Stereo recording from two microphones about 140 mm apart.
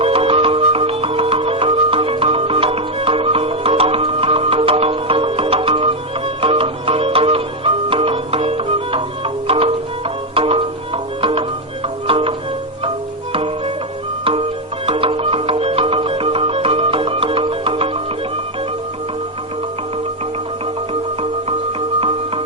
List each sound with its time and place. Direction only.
0.0 s music: 40° right (ahead or behind)
14.8 s music: 40° right (ahead or behind)